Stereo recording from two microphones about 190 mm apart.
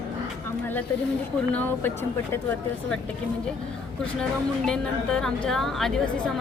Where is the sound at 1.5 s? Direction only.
10° left (ahead or behind).